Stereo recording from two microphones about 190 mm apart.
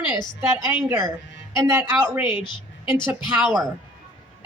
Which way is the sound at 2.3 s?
25° left (ahead or behind).